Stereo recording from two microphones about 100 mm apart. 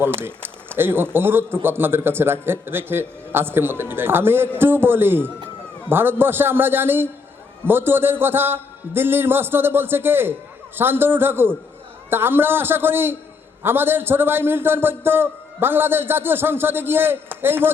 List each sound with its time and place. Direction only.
0.0 s a man's voice: 20° right (ahead or behind)